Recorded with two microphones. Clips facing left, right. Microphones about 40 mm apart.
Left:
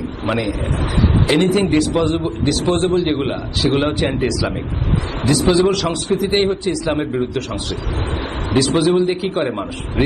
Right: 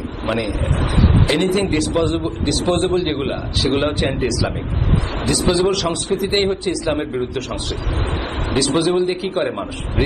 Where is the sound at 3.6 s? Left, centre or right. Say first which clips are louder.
Left 1 dB; centre.